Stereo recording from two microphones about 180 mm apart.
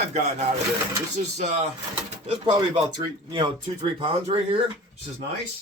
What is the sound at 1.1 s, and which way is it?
Speech, 40° right (ahead or behind).